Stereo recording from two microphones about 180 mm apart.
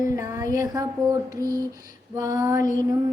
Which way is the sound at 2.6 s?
45° left (ahead or behind).